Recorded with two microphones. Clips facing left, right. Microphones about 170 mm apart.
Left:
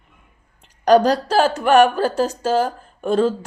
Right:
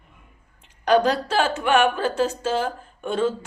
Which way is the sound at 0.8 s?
40° left (ahead or behind).